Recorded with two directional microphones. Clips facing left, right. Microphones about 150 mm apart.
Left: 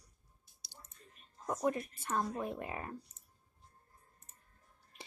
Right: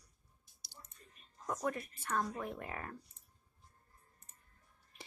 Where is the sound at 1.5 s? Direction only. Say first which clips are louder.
Left 4 dB; 25° left (ahead or behind).